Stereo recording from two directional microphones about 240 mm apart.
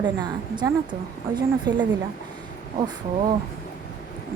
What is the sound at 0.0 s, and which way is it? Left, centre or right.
Speech, centre.